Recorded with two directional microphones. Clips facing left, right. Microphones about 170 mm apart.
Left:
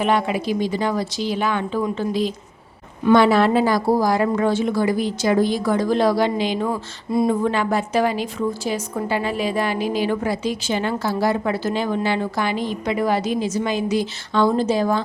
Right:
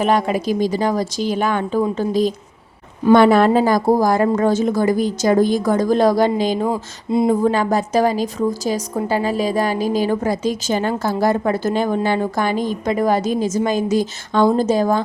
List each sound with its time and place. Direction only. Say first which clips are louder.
0.0 s a woman's voice: right 3 dB; 40° right (ahead or behind)
6.7 s a sound: right 3 dB; 25° right (ahead or behind)
7.4 s a woman's voice: right 4 dB; 40° right (ahead or behind)